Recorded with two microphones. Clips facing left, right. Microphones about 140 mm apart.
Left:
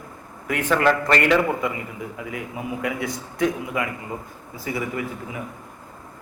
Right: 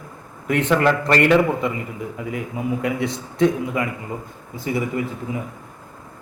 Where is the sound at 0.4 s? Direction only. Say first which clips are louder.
Right 2 dB; 25° right (ahead or behind).